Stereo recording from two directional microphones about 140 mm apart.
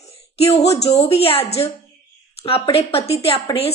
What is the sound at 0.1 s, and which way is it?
A woman's voice, 45° left (ahead or behind).